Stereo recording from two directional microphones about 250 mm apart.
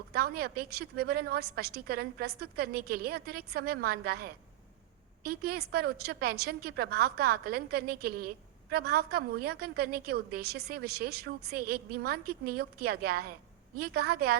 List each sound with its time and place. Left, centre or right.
0.1 s a woman's voice: right